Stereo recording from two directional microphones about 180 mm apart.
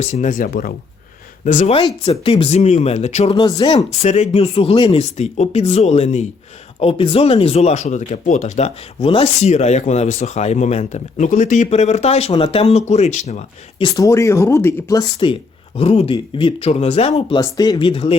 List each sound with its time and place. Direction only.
0.0 s speech: 40° left (ahead or behind); by 0.7 s 55° left (ahead or behind)
1.5 s speech: 40° left (ahead or behind)
3.3 s speech: 25° left (ahead or behind)
13.9 s speech: 15° left (ahead or behind); by 17.4 s 30° left (ahead or behind)
17.4 s speech: 20° left (ahead or behind)